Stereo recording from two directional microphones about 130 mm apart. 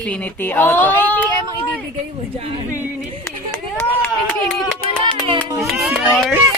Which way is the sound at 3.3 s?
20° left (ahead or behind).